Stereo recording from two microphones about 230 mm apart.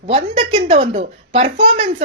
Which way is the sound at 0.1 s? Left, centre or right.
Right.